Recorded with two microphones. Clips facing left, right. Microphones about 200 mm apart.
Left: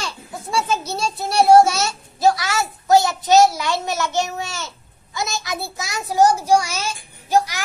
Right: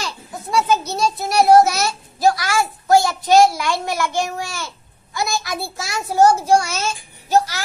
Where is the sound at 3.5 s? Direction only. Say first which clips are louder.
Right 1 dB; 20° left (ahead or behind).